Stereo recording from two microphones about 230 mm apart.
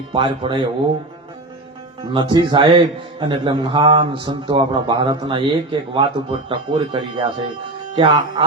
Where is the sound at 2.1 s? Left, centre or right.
Centre.